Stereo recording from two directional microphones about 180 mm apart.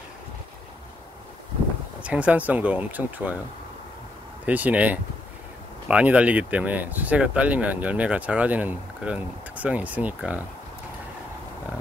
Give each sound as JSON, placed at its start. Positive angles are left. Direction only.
{"t": 2.0, "sound": "speech", "side_deg": -5}
{"t": 4.5, "sound": "speech", "side_deg": -10}